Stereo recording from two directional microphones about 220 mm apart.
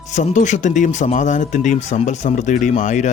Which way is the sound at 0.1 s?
35° left (ahead or behind).